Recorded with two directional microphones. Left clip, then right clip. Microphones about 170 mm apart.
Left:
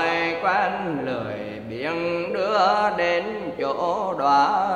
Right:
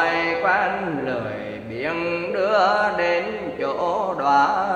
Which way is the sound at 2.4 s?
25° left (ahead or behind).